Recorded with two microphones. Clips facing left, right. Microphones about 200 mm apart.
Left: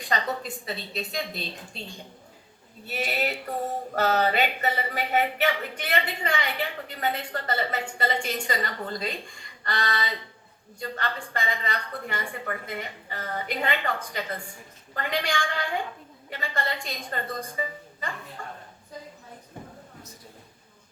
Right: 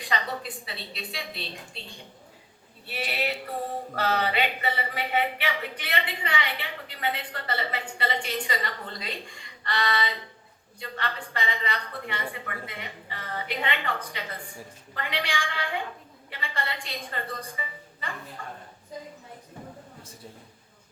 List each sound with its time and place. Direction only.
0.0 s a man's voice: 45° left (ahead or behind)
2.8 s a man's voice: 45° left (ahead or behind)